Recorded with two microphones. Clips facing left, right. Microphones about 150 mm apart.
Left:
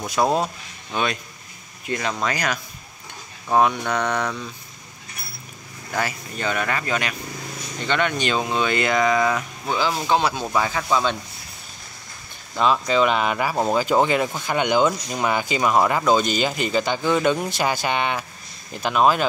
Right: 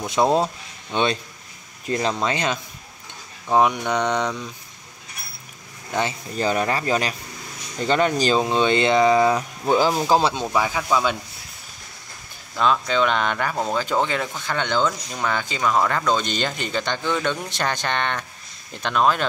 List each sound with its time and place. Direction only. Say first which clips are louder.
0.0 s speech: right 2 dB; 25° right (ahead or behind)
3.5 s mantra: even; 15° right (ahead or behind)
5.9 s speech: right 2 dB; 30° right (ahead or behind)
10.5 s mantra: even; 10° right (ahead or behind)
12.8 s speech: left 2 dB; 5° left (ahead or behind)